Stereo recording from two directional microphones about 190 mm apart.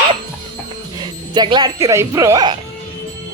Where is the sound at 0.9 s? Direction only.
25° right (ahead or behind).